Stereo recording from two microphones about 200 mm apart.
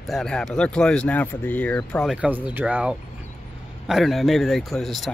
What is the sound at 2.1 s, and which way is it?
Speech, 5° right (ahead or behind).